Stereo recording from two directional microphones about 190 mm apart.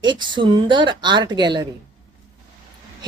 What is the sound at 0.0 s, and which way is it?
Speech, 25° right (ahead or behind).